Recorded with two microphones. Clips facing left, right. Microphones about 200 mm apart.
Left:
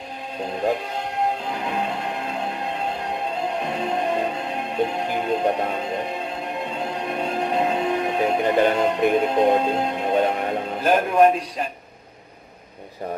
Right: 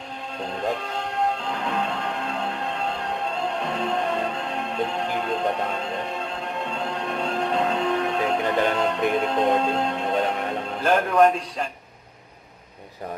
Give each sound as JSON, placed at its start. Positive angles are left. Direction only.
{"t": 1.5, "sound": "music", "side_deg": 15}
{"t": 10.8, "sound": "speech", "side_deg": 10}